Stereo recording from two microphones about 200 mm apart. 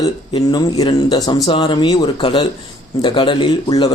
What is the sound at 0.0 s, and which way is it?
Speech, 20° left (ahead or behind).